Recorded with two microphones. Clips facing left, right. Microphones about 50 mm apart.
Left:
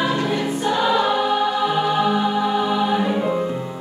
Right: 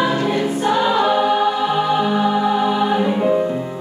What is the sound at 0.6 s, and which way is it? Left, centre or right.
Choir, centre.